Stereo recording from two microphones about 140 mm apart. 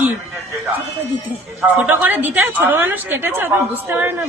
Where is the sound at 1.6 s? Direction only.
10° right (ahead or behind).